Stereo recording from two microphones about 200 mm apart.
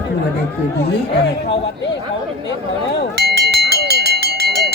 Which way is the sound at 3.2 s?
55° right (ahead or behind).